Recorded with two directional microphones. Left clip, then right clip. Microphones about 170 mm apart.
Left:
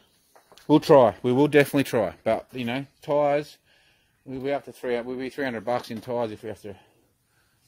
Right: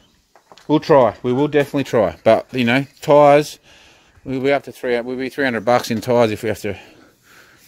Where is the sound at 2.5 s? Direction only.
35° right (ahead or behind).